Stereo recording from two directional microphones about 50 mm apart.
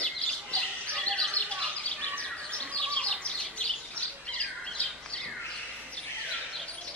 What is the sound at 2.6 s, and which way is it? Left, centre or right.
Bird, centre.